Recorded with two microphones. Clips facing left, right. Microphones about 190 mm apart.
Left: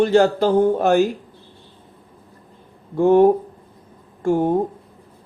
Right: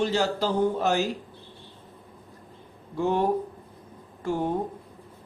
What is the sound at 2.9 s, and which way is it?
Speech, 50° left (ahead or behind).